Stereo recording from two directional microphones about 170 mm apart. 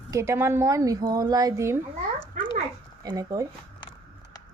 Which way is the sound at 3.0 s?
20° right (ahead or behind).